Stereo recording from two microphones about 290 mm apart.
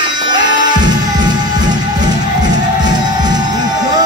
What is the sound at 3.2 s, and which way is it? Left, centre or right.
Music, centre.